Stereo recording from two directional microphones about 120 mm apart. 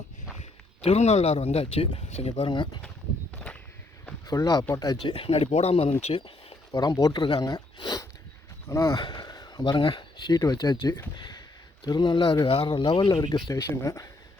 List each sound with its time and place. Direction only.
0.8 s speech: 60° left (ahead or behind)
2.5 s speech: 40° left (ahead or behind)
3.3 s a sound: 10° left (ahead or behind)
4.3 s speech: 35° left (ahead or behind)
5.1 s speech: 55° left (ahead or behind)
6.7 s speech: 35° left (ahead or behind)
9.0 s speech: 35° left (ahead or behind)
13.5 s speech: 30° left (ahead or behind)